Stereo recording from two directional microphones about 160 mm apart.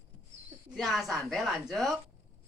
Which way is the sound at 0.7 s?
Centre (ahead or behind).